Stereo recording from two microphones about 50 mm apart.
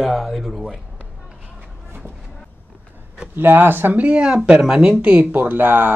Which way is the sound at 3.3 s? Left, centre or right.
Right.